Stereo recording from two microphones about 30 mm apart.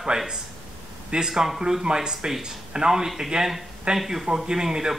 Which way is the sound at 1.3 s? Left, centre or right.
Centre.